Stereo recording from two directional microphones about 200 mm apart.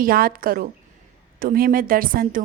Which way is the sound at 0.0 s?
45° right (ahead or behind).